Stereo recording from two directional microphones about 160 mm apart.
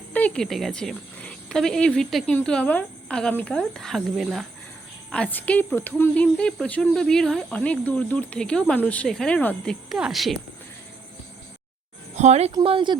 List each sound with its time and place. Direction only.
0.1 s a woman's voice: 10° left (ahead or behind)
12.1 s a woman's voice: 45° right (ahead or behind)
12.6 s a woman's voice: 30° right (ahead or behind)